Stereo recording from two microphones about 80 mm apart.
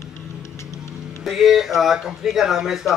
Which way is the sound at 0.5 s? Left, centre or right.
Left.